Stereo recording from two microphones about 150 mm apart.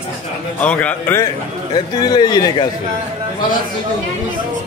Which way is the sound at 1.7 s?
25° left (ahead or behind).